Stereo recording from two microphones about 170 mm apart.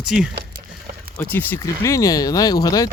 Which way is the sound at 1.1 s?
10° left (ahead or behind).